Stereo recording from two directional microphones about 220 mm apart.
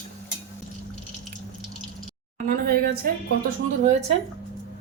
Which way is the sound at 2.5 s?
45° right (ahead or behind).